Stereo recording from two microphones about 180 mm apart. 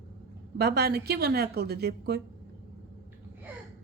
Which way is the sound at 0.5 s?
60° right (ahead or behind).